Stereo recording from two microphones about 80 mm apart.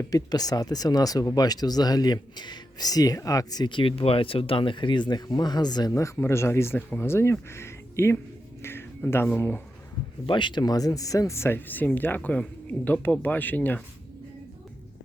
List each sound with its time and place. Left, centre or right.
0.1 s speech: left
3.7 s speech: left
5.9 s speech: left
10.2 s speech: left
11.3 s speech: left